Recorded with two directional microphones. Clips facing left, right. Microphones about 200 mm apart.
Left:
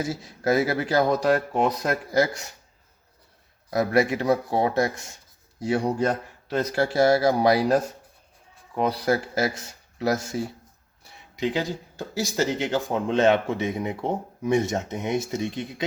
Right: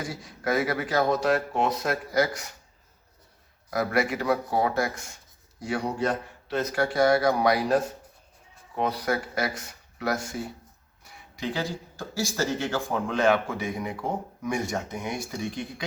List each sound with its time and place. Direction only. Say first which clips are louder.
0.0 s speech: left 5 dB; 25° left (ahead or behind)
3.7 s speech: left 4 dB; 25° left (ahead or behind)
6.0 s a man's voice: left 3 dB; 40° left (ahead or behind)
6.7 s speech: left 2 dB; 25° left (ahead or behind)
8.9 s speech: left 4 dB; 30° left (ahead or behind)